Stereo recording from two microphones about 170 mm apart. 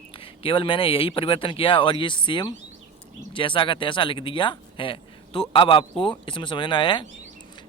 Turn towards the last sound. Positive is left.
turn(degrees=30)  # may be behind; listen again after turning